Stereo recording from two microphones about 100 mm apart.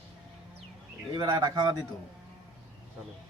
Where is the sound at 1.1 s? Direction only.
40° right (ahead or behind).